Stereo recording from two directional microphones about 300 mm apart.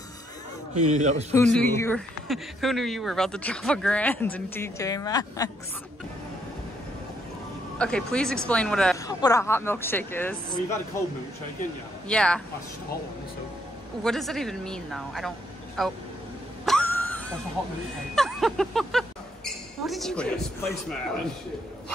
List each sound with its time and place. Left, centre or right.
0.9 s a man's voice: right
1.3 s speech: centre
7.8 s speech: centre
12.1 s speech: centre
14.0 s speech: centre
16.6 s a sound: centre
18.1 s speech: centre